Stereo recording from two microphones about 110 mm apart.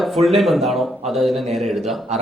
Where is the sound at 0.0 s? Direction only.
Centre (ahead or behind).